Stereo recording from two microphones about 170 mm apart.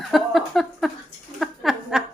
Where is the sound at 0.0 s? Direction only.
Centre (ahead or behind).